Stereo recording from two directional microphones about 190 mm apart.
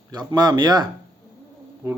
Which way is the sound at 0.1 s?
20° right (ahead or behind).